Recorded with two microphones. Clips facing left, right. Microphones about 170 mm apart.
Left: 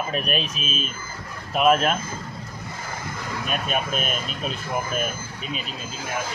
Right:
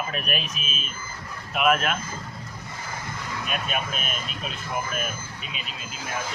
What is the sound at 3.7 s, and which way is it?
Speech, 40° left (ahead or behind).